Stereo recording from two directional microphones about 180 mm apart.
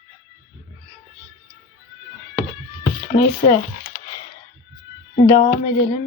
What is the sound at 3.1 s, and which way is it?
Speech, 30° left (ahead or behind).